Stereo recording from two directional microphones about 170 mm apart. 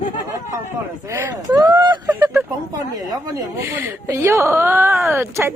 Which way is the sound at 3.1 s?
20° right (ahead or behind).